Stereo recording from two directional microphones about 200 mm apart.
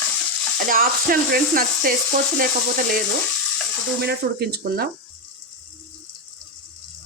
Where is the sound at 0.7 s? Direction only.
45° right (ahead or behind).